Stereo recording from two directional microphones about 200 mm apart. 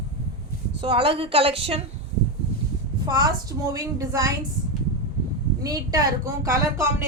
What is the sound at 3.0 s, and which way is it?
A woman's voice, 20° right (ahead or behind).